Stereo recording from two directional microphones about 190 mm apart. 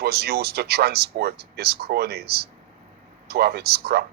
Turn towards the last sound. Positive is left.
turn(degrees=-55)  # may be behind; listen again after turning